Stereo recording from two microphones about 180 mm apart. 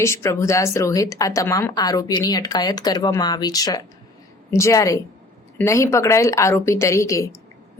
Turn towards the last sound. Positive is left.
turn(degrees=15)  # may be behind; listen again after turning